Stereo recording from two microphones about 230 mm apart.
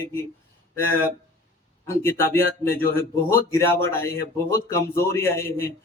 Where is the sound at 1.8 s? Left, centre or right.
Centre.